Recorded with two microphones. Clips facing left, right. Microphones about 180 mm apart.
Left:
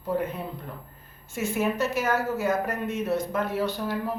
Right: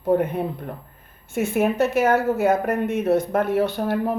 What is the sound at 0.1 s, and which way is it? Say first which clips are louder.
A woman's voice: right 8 dB; 60° right (ahead or behind).